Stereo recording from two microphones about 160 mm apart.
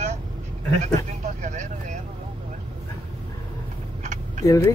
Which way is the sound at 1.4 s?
50° right (ahead or behind).